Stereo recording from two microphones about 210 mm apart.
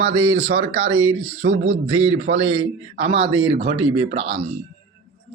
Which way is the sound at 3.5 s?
25° right (ahead or behind).